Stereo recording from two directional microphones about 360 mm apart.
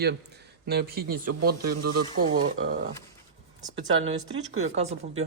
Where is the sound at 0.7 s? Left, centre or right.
Right.